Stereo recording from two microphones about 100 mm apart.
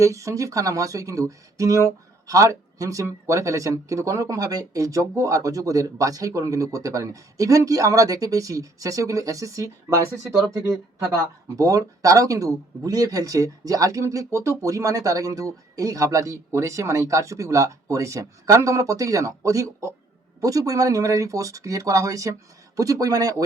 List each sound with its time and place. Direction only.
0.0 s speech: 30° right (ahead or behind)